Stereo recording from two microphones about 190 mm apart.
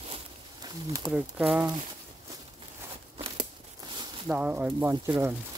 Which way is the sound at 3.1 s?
30° right (ahead or behind).